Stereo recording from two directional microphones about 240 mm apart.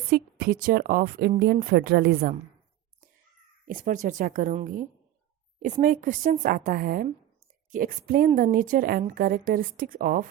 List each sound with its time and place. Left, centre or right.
0.1 s speech: right
3.7 s speech: right